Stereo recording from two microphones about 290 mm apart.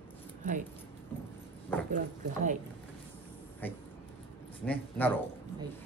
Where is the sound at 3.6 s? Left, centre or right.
Centre.